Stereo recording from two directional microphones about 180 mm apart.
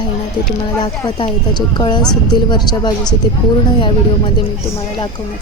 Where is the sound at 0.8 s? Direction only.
25° left (ahead or behind).